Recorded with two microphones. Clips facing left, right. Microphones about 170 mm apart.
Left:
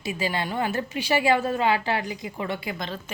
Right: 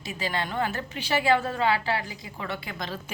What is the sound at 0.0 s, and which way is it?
A woman's voice, 10° left (ahead or behind).